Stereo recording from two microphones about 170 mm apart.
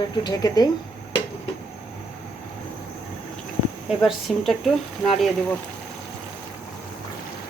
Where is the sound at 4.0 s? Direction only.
Centre (ahead or behind).